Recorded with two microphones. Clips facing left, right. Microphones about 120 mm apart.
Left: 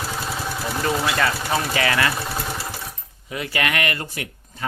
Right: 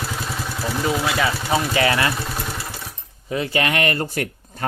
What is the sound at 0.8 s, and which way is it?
Speech, 5° right (ahead or behind).